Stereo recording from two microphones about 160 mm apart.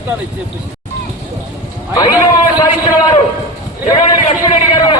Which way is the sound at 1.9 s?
25° left (ahead or behind).